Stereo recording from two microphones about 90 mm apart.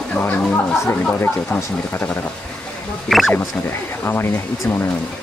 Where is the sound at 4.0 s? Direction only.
25° left (ahead or behind).